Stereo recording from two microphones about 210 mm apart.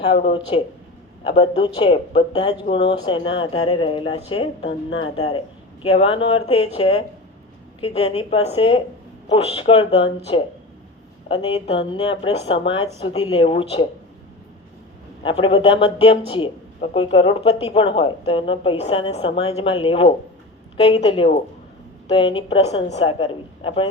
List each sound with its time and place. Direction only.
0.0 s speech: 25° left (ahead or behind)
15.2 s speech: 25° left (ahead or behind)